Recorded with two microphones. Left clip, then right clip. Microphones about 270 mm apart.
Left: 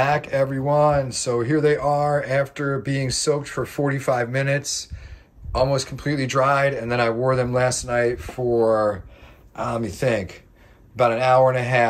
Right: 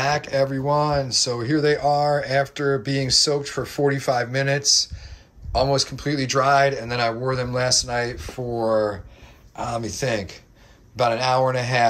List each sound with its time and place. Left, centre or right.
0.0 s speech: centre